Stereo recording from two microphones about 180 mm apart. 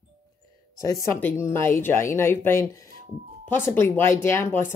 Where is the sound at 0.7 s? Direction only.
20° left (ahead or behind).